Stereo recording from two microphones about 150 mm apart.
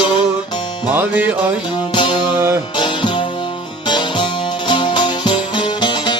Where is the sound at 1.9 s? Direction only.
30° left (ahead or behind).